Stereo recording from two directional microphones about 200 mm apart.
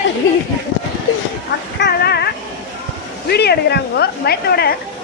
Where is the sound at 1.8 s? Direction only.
55° left (ahead or behind).